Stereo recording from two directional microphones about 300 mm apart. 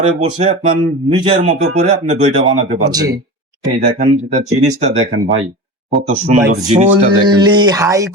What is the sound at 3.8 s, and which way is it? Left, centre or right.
Speech, right.